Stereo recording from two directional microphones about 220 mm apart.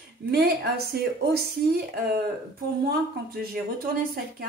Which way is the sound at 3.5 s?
45° right (ahead or behind).